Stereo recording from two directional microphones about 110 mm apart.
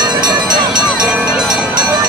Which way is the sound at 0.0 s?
40° right (ahead or behind).